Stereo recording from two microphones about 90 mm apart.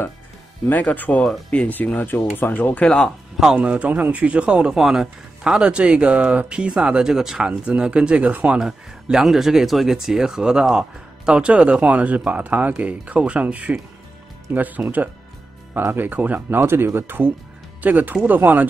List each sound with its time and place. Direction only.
0.7 s speech: 20° left (ahead or behind)
3.3 s speech: 10° right (ahead or behind)